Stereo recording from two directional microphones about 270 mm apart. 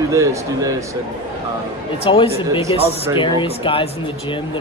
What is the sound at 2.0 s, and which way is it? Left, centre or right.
Speech, centre.